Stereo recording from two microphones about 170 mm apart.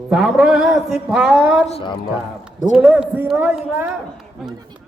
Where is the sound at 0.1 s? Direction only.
Centre (ahead or behind).